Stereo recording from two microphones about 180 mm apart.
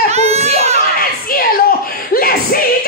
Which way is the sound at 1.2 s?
55° left (ahead or behind).